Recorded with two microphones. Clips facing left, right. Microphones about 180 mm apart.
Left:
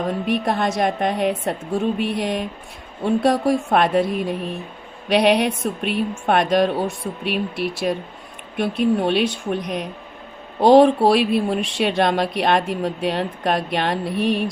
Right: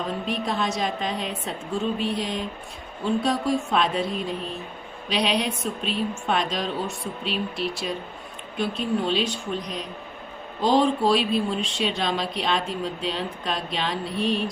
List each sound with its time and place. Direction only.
0.3 s speech: 60° left (ahead or behind)